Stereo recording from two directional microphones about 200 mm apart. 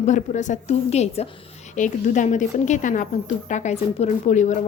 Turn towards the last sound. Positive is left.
turn(degrees=35)  # may be behind; listen again after turning